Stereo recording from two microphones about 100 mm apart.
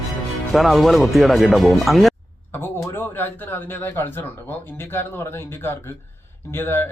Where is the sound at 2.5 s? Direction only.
25° left (ahead or behind).